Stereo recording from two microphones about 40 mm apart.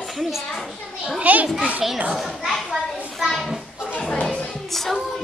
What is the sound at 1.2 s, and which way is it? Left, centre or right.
Speech, right.